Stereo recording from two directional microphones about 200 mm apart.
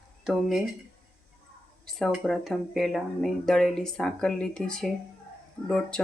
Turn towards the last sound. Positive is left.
turn(degrees=5)  # may be behind; listen again after turning